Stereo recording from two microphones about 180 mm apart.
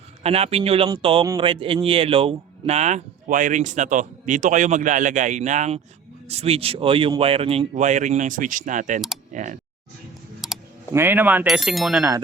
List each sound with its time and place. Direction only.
0.2 s speech: 35° right (ahead or behind)
10.4 s computer keyboard: centre (ahead or behind)
10.9 s speech: 10° right (ahead or behind)